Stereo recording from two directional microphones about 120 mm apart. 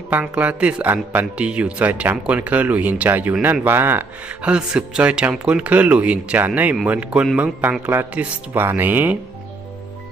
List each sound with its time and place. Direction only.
0.1 s speech: 10° right (ahead or behind)